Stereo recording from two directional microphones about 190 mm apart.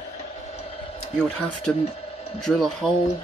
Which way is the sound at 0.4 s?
35° left (ahead or behind).